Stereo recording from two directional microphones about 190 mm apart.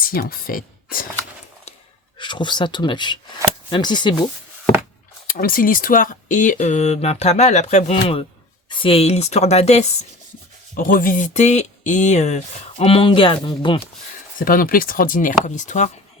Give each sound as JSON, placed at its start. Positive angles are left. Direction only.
{"t": 0.0, "sound": "speech", "side_deg": 50}
{"t": 2.1, "sound": "speech", "side_deg": 25}
{"t": 5.3, "sound": "speech", "side_deg": 50}
{"t": 10.8, "sound": "speech", "side_deg": 45}
{"t": 14.3, "sound": "speech", "side_deg": 50}